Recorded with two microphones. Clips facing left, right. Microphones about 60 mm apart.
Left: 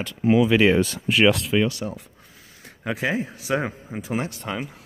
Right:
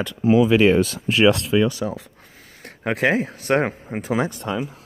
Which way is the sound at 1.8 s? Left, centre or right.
Right.